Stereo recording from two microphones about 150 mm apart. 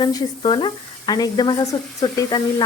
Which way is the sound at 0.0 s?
25° left (ahead or behind).